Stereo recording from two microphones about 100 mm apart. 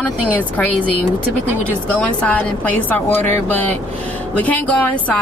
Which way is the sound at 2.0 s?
15° left (ahead or behind).